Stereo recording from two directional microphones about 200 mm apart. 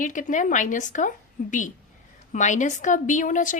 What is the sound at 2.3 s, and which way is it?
A woman's voice, 35° left (ahead or behind).